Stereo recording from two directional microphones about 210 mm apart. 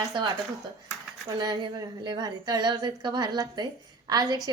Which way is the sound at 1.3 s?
20° right (ahead or behind).